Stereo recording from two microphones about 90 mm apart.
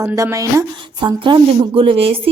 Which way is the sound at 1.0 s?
60° right (ahead or behind).